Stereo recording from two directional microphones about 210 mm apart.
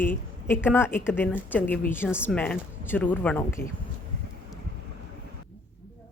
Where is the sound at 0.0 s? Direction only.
10° left (ahead or behind).